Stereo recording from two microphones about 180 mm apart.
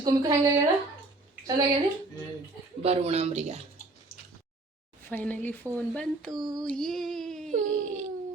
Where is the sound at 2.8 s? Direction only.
35° right (ahead or behind).